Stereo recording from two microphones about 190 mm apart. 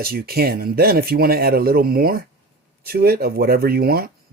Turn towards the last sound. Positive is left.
turn(degrees=-50)  # may be behind; listen again after turning